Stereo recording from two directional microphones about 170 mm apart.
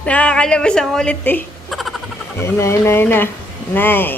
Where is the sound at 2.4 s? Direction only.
15° left (ahead or behind).